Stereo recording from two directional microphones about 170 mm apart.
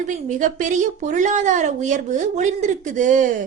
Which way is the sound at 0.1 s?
50° right (ahead or behind).